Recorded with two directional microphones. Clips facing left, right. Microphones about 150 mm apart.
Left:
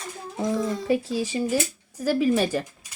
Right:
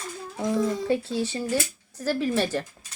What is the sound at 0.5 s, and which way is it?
Speech, centre (ahead or behind).